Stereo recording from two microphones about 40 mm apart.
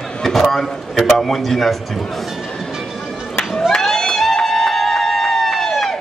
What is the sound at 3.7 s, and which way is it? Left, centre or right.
Music, centre.